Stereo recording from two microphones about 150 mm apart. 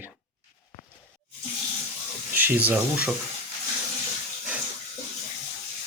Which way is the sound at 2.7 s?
10° right (ahead or behind).